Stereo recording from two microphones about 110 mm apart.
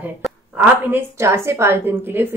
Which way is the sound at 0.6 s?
20° right (ahead or behind).